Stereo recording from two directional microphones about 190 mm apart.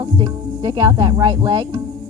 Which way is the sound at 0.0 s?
20° right (ahead or behind).